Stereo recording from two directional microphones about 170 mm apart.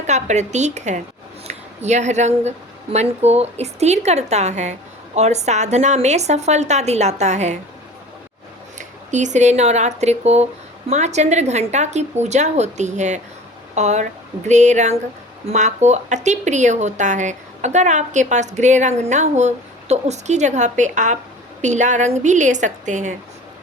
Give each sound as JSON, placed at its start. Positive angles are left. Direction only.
{"t": 0.1, "sound": "a woman's voice", "side_deg": -40}
{"t": 8.8, "sound": "speech", "side_deg": -45}